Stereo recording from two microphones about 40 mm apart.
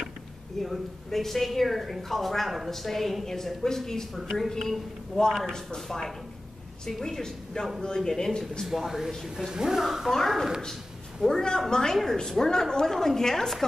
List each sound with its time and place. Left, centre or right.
0.6 s a woman's voice: centre
4.1 s speech: centre
8.6 s a woman's voice: centre
9.5 s speech: centre
9.8 s a woman's voice: centre
11.2 s speech: centre